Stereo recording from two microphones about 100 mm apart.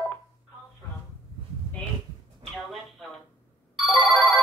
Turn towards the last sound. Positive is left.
turn(degrees=0)  # may be behind; listen again after turning